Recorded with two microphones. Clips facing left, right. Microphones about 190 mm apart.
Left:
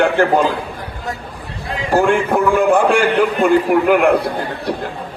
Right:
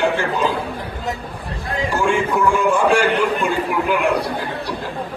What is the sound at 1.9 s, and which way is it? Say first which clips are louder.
A man's voice: left 6 dB; 60° left (ahead or behind).